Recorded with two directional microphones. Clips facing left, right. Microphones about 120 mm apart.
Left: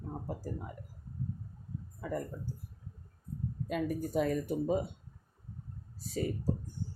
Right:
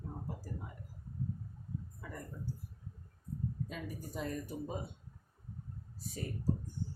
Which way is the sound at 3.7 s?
75° left (ahead or behind).